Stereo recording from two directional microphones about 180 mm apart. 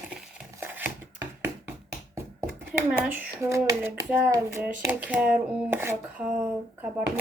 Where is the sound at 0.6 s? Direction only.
10° right (ahead or behind).